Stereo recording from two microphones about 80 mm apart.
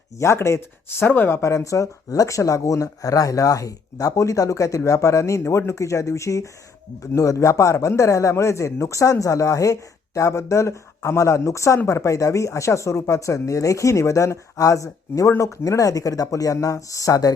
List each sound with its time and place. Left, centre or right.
0.2 s speech: left